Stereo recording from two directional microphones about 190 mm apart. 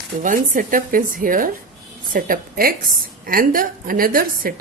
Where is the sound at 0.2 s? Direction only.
45° right (ahead or behind).